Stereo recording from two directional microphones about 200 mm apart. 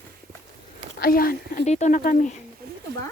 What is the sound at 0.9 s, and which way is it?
Speech, 45° left (ahead or behind).